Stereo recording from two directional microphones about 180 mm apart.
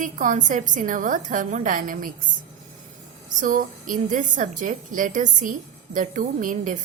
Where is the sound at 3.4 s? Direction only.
50° right (ahead or behind).